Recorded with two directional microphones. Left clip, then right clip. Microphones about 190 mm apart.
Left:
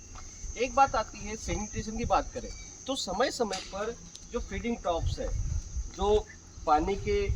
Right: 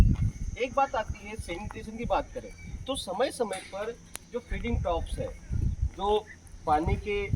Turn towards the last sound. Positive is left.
turn(degrees=5)  # may be behind; listen again after turning